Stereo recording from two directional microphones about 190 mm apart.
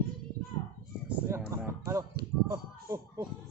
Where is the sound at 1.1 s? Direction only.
15° right (ahead or behind).